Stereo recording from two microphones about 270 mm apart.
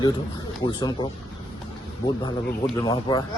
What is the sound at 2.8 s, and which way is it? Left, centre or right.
Speech, centre.